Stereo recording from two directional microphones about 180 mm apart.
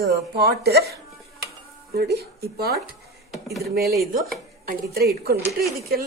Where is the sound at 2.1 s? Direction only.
60° right (ahead or behind).